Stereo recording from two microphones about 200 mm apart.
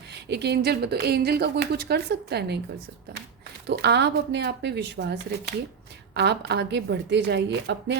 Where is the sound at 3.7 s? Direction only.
60° right (ahead or behind).